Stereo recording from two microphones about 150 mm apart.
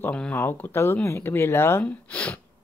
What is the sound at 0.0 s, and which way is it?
Speech, 5° left (ahead or behind).